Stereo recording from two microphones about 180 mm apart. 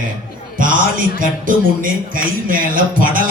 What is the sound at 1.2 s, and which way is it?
A man's voice, 50° right (ahead or behind).